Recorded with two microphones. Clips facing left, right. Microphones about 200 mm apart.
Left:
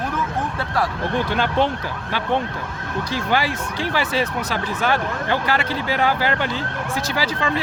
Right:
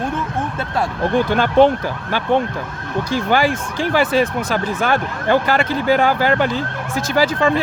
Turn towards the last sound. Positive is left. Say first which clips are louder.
# right 7 dB
turn(degrees=-50)  # may be behind; listen again after turning